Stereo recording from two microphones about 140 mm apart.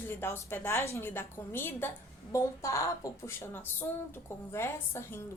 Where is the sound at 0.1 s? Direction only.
20° left (ahead or behind).